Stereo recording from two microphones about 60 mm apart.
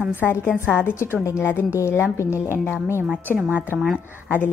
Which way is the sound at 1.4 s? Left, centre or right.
Left.